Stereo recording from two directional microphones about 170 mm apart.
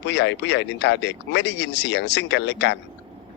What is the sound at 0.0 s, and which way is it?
A man's voice, 90° left.